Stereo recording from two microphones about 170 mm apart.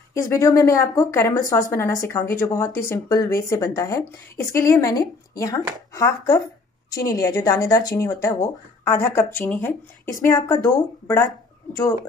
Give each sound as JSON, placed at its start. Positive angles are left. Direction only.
{"t": 0.1, "sound": "a woman's voice", "side_deg": 20}